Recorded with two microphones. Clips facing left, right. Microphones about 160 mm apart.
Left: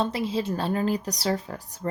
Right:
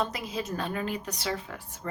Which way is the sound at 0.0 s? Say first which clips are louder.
Left 6 dB; 30° left (ahead or behind).